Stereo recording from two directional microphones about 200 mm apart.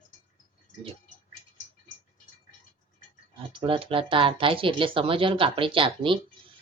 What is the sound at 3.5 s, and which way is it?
Speech, 25° right (ahead or behind).